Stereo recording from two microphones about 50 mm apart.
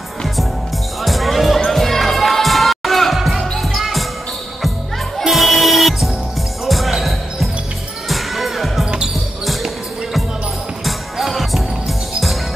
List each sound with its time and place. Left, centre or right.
1.0 s music: centre
5.2 s music: centre
6.6 s basketball bounce: centre
8.1 s music: centre
8.8 s basketball bounce: centre
10.9 s music: centre